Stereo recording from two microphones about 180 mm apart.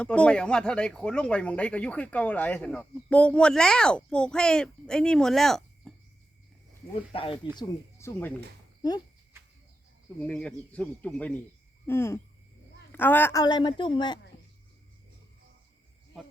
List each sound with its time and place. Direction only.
0.0 s speech: 5° left (ahead or behind)
7.1 s speech: 30° left (ahead or behind)
7.5 s speech: 20° left (ahead or behind)
10.2 s a man's voice: 5° left (ahead or behind)
13.4 s a woman's voice: 25° left (ahead or behind)